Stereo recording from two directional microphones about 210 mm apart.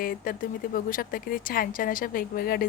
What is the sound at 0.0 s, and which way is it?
Speech, 40° left (ahead or behind).